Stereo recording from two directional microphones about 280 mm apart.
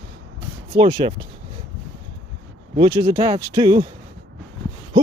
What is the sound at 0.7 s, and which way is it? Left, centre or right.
Speech, centre.